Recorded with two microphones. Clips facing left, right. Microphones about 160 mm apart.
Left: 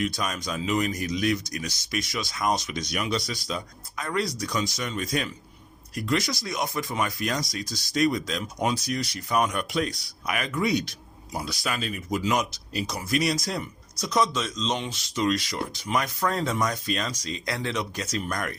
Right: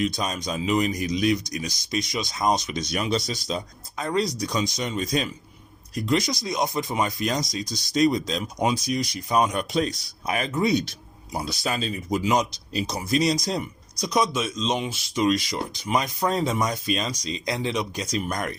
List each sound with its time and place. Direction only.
0.0 s speech: 25° right (ahead or behind)